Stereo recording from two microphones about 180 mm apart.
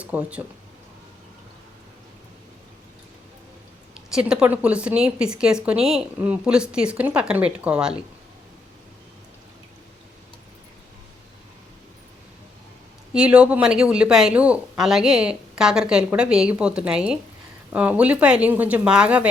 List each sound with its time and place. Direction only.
0.0 s speech: 10° right (ahead or behind)
4.1 s speech: 5° right (ahead or behind)
13.1 s speech: 5° right (ahead or behind)